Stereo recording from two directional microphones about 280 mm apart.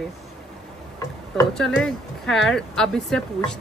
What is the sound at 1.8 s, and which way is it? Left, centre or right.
Speech, centre.